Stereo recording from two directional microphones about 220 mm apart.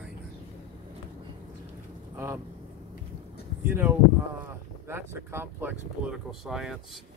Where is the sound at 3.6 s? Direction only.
10° right (ahead or behind).